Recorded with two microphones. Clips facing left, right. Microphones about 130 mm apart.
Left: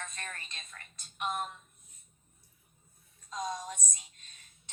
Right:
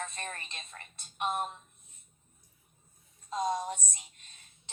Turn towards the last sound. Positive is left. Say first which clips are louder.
# right 6 dB
turn(degrees=-30)  # may be behind; listen again after turning